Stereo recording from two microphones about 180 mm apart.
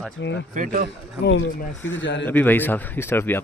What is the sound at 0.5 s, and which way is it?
Speech, 50° right (ahead or behind).